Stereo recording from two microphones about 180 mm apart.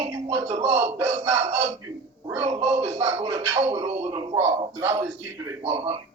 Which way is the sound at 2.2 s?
15° right (ahead or behind).